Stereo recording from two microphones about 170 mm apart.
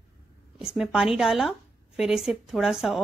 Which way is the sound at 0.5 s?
Centre (ahead or behind).